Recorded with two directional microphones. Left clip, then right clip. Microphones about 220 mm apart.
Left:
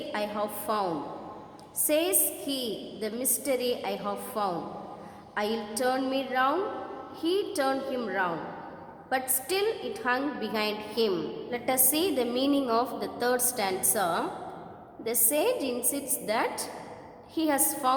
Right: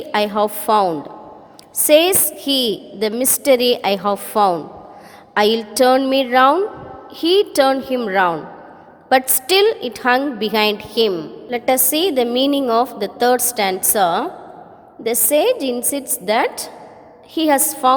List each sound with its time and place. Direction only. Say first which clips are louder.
0.1 s a woman's voice: right 15 dB; 40° right (ahead or behind)